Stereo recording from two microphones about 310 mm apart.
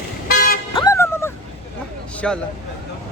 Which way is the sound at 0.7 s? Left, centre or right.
Centre.